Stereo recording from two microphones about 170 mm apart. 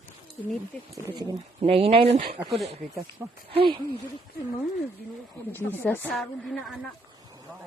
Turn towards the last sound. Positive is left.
turn(degrees=0)  # may be behind; listen again after turning